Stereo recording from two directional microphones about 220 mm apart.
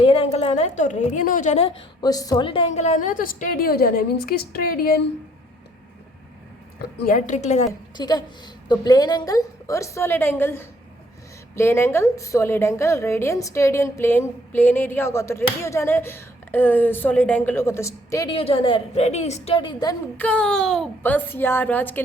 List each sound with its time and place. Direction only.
0.0 s a woman's voice: 25° left (ahead or behind); by 4.9 s 40° left (ahead or behind)
7.1 s a woman's voice: 35° left (ahead or behind)
7.9 s a woman's voice: 20° left (ahead or behind)
20.2 s a woman's voice: 5° left (ahead or behind)